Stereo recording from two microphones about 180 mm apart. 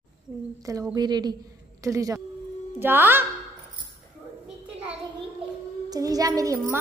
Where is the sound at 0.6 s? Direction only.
20° right (ahead or behind).